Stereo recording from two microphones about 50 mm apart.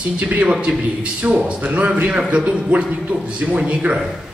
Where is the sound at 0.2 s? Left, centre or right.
Right.